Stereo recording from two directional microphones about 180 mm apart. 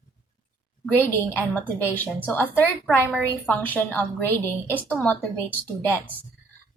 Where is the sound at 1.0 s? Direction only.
10° left (ahead or behind).